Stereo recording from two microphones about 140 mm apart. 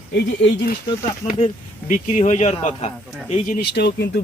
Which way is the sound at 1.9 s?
60° left (ahead or behind).